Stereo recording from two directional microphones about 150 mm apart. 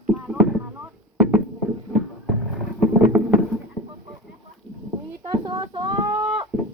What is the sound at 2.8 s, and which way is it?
Boat, 10° right (ahead or behind).